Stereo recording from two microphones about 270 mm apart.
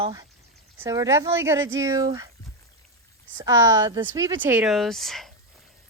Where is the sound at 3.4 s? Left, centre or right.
Centre.